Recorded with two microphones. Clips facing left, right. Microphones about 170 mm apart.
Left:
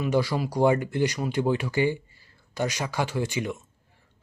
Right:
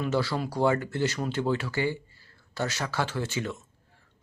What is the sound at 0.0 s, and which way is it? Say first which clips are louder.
Speech: left 3 dB; 15° left (ahead or behind).